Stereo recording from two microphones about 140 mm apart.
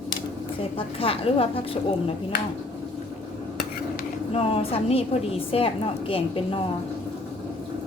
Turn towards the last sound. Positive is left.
turn(degrees=40)  # may be behind; listen again after turning